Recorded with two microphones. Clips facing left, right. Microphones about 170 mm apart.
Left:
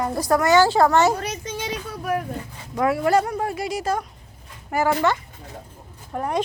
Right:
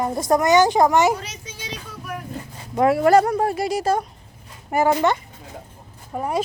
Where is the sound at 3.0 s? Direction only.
45° right (ahead or behind).